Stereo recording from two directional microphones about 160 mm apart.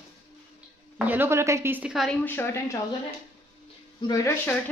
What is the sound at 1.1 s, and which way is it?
Speech, 15° right (ahead or behind).